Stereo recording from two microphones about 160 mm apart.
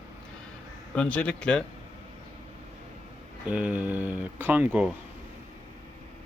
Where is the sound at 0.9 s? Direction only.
5° left (ahead or behind).